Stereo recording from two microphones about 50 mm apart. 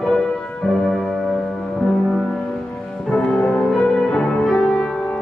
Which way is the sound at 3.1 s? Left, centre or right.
Centre.